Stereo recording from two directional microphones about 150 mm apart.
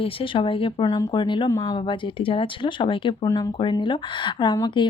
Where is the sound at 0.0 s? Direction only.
35° left (ahead or behind).